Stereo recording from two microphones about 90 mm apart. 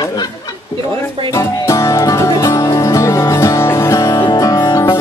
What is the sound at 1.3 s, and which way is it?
Music, 30° left (ahead or behind).